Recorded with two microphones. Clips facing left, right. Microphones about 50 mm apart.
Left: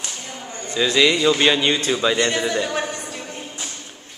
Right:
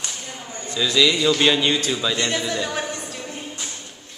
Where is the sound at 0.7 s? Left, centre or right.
Left.